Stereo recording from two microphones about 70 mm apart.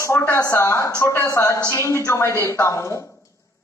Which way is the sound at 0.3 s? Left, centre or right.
Left.